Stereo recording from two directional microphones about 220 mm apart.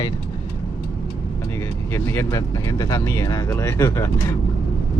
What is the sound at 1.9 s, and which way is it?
Speech, 15° left (ahead or behind).